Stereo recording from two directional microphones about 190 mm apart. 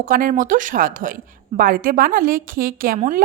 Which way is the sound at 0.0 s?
45° right (ahead or behind).